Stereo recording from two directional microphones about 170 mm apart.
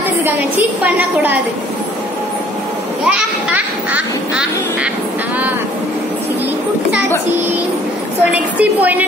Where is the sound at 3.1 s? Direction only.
5° right (ahead or behind).